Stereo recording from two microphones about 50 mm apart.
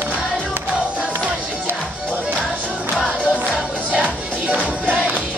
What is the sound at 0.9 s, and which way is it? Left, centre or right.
Music, centre.